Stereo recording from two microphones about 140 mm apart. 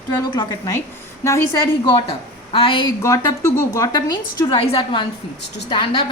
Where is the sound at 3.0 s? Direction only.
20° left (ahead or behind).